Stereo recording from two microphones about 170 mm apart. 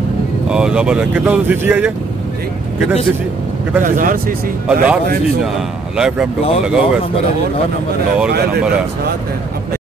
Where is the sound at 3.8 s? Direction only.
50° right (ahead or behind).